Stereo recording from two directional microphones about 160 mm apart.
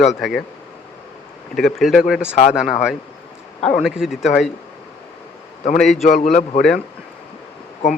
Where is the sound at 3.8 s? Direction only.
Centre (ahead or behind).